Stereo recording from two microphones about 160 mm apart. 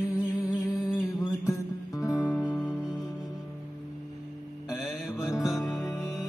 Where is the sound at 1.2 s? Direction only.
20° left (ahead or behind).